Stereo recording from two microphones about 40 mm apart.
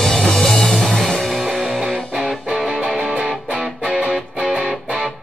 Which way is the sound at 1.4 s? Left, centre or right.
Right.